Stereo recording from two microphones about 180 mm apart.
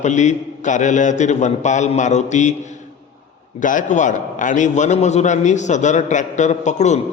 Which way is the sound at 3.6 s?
45° left (ahead or behind).